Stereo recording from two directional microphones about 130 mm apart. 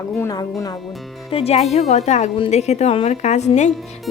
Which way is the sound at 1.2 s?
50° left (ahead or behind).